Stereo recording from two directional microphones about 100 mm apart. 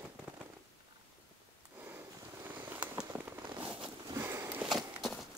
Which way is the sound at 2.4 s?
15° right (ahead or behind).